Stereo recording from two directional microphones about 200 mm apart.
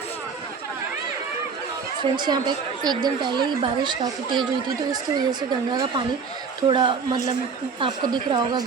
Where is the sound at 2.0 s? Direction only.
20° right (ahead or behind).